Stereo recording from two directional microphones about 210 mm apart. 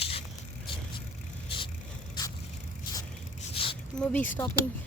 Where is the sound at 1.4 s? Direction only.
25° left (ahead or behind).